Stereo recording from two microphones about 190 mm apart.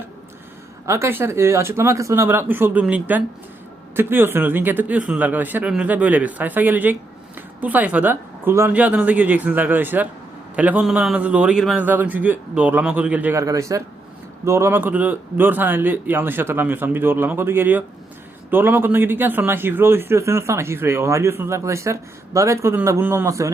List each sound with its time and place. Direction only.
0.9 s a man's voice: 15° right (ahead or behind)